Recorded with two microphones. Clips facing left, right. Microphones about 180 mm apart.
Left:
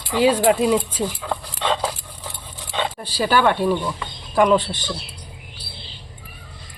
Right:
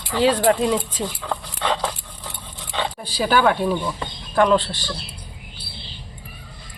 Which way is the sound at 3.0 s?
Centre (ahead or behind).